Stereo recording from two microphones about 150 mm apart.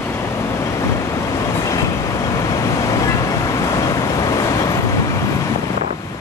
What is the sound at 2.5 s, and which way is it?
Vehicle, 20° left (ahead or behind).